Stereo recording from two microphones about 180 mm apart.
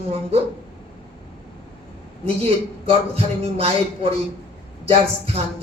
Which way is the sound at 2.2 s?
35° right (ahead or behind).